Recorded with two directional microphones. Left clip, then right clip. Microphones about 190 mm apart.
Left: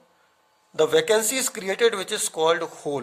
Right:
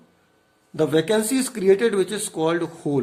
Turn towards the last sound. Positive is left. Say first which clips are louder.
# right 1 dB
turn(degrees=35)  # may be behind; listen again after turning